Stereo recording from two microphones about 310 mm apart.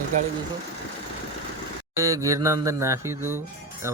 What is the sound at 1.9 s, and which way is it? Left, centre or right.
Mantra, centre.